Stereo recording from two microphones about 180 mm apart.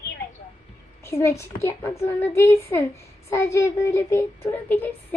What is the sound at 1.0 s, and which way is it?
A child's voice, 15° left (ahead or behind).